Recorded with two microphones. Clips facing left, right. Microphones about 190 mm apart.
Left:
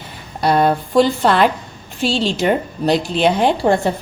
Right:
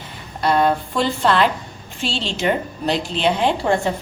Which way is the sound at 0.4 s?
40° left (ahead or behind).